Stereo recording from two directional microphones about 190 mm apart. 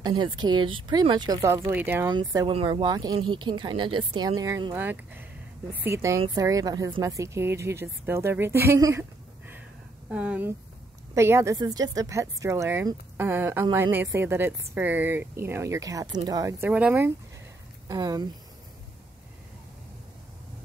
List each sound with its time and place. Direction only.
0.0 s speech: 20° right (ahead or behind)
2.1 s speech: 25° right (ahead or behind)
10.0 s speech: 5° right (ahead or behind)
17.8 s speech: 20° right (ahead or behind)